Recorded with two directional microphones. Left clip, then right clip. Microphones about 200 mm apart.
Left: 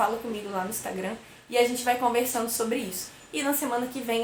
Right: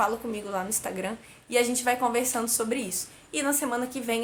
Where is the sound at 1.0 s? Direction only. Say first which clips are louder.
Even; 25° right (ahead or behind).